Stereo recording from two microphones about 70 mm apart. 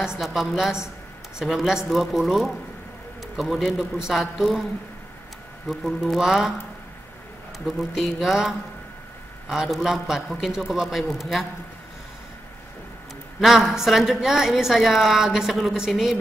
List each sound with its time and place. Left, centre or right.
0.2 s a woman's voice: centre
5.7 s a woman's voice: centre
7.5 s a woman's voice: centre
13.4 s a woman's voice: centre